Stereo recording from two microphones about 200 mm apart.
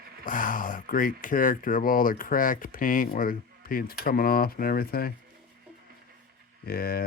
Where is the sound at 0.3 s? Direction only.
40° left (ahead or behind).